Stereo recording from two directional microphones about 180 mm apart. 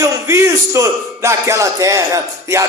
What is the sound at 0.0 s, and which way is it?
A man's voice, 15° right (ahead or behind).